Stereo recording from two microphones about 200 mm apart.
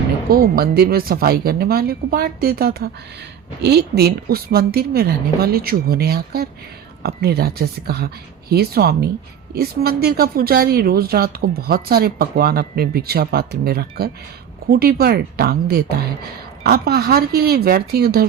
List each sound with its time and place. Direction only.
0.3 s speech: 50° right (ahead or behind)